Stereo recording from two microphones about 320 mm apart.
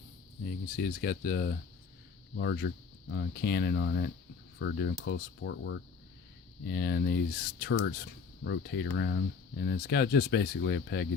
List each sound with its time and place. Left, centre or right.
0.8 s speech: left